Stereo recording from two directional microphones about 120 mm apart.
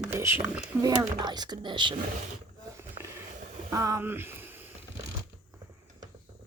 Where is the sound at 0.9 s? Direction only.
35° right (ahead or behind).